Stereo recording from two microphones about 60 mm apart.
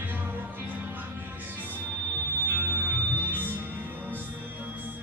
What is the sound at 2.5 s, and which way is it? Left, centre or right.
Music, right.